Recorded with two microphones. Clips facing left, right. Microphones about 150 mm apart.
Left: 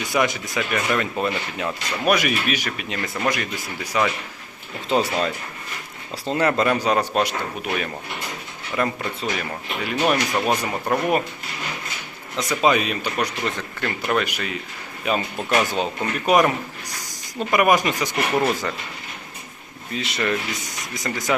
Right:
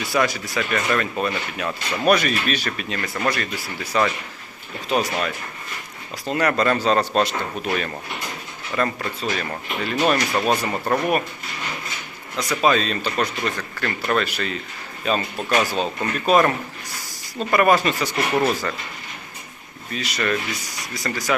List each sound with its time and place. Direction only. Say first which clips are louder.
0.0 s speech: even; 20° left (ahead or behind)
12.4 s speech: even; 20° left (ahead or behind)
19.9 s speech: even; 25° left (ahead or behind)